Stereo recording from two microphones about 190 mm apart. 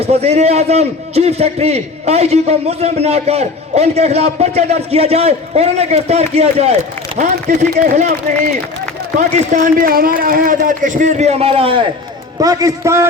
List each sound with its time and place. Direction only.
0.0 s a man's voice: 35° right (ahead or behind)
9.1 s a man's voice: 40° right (ahead or behind)
12.4 s a man's voice: 20° right (ahead or behind)